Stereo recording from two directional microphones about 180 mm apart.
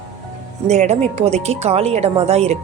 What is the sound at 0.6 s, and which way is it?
Speech, 40° right (ahead or behind).